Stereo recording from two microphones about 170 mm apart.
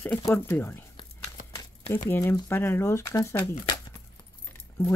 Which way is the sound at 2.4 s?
15° left (ahead or behind).